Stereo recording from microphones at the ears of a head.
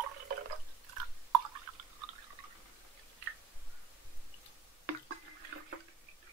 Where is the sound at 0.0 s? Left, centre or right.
Right.